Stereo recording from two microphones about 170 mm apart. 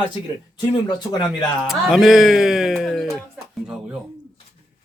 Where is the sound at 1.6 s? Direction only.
Centre (ahead or behind).